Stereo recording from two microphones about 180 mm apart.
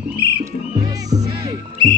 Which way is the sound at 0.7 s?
20° right (ahead or behind).